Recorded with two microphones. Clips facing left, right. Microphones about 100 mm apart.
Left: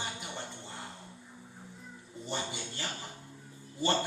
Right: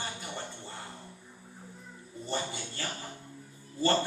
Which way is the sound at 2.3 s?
20° left (ahead or behind).